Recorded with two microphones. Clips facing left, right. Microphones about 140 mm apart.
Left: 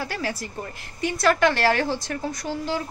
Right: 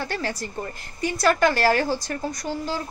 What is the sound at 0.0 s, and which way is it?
A woman's voice, 5° left (ahead or behind).